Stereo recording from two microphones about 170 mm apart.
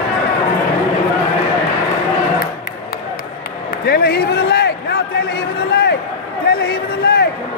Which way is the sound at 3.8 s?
70° left (ahead or behind).